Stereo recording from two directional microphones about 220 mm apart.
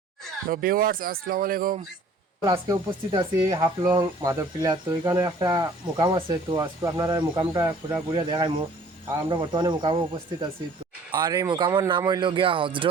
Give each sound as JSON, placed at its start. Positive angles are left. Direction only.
{"t": 0.4, "sound": "speech", "side_deg": -40}
{"t": 2.4, "sound": "speech", "side_deg": -20}
{"t": 11.1, "sound": "speech", "side_deg": -20}